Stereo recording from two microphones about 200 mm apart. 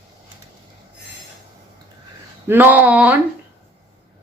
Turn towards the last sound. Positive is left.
turn(degrees=-5)  # may be behind; listen again after turning